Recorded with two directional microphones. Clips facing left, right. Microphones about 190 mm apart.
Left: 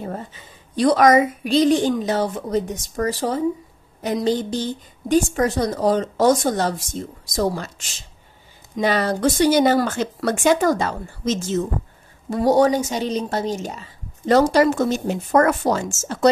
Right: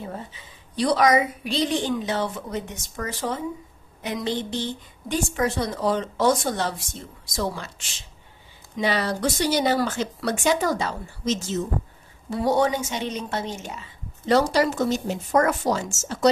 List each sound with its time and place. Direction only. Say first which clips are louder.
0.0 s a woman's voice: left 4 dB; 50° left (ahead or behind)
8.7 s a woman's voice: left 4 dB; 50° left (ahead or behind)